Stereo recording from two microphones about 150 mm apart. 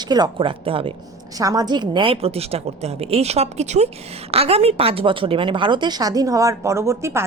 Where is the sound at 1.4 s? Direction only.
25° right (ahead or behind).